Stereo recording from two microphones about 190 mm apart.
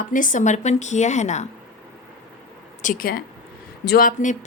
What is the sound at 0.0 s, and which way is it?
A woman's voice, 45° left (ahead or behind).